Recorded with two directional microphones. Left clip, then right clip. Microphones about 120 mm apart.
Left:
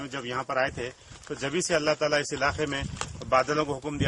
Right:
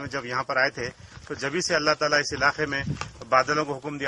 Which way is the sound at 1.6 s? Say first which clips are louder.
Right 2 dB; centre (ahead or behind).